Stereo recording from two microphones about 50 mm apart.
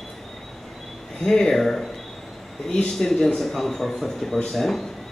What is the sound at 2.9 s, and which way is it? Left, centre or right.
A man's voice, centre.